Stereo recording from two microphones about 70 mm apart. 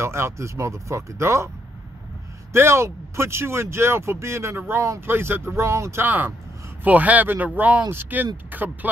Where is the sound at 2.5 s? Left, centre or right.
Right.